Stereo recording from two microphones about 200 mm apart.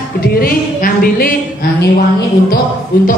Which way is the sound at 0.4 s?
50° left (ahead or behind).